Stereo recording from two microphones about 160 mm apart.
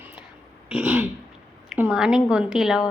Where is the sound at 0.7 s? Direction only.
5° right (ahead or behind).